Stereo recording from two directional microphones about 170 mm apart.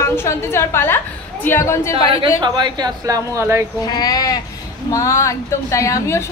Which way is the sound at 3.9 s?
20° left (ahead or behind).